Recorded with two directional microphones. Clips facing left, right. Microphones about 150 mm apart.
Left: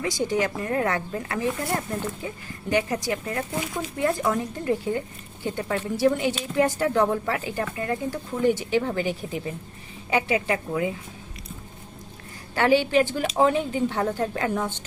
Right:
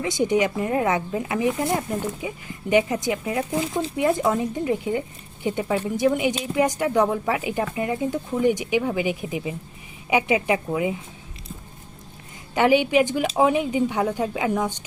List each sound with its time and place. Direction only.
0.0 s speech: 20° right (ahead or behind)
12.5 s speech: 15° right (ahead or behind)